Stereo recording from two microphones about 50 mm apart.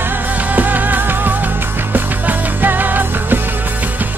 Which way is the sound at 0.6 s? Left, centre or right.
Right.